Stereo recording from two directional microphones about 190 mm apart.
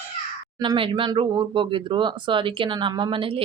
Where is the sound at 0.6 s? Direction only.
25° right (ahead or behind).